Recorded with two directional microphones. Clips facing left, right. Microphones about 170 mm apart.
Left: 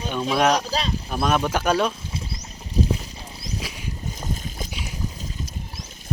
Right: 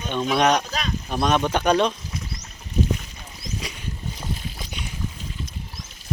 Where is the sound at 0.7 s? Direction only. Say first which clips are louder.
Left 3 dB; 30° left (ahead or behind).